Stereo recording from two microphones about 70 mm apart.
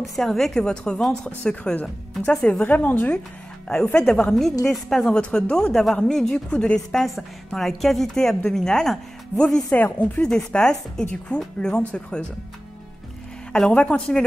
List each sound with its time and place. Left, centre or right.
0.2 s a woman's voice: centre; by 3.2 s left
3.6 s a woman's voice: centre
6.9 s a woman's voice: centre
9.8 s a woman's voice: left
10.2 s speech: centre
13.5 s speech: centre